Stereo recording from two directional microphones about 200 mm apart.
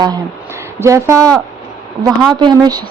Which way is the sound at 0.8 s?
15° right (ahead or behind).